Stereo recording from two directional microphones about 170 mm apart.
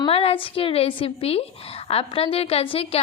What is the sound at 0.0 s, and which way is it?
A woman's voice, 35° left (ahead or behind).